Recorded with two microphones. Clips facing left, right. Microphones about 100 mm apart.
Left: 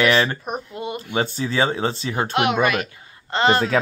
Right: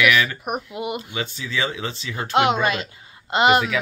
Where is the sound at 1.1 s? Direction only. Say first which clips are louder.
Left 5 dB; 35° left (ahead or behind).